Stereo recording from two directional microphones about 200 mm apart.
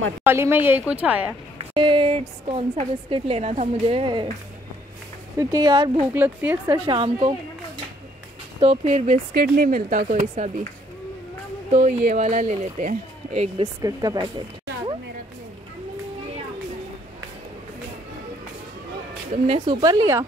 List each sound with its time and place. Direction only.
0.2 s a woman's voice: 10° right (ahead or behind)
1.6 s a woman's voice: 25° right (ahead or behind)
5.4 s a woman's voice: 20° right (ahead or behind)
6.1 s a woman's voice: 10° right (ahead or behind)
6.7 s a woman's voice: 25° right (ahead or behind)
8.5 s speech: 35° right (ahead or behind)
11.7 s speech: 40° right (ahead or behind)
13.7 s a woman's voice: 20° right (ahead or behind)
19.4 s a woman's voice: 25° right (ahead or behind)